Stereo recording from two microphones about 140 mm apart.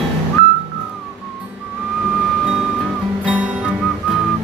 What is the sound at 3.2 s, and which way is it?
Music, 10° right (ahead or behind).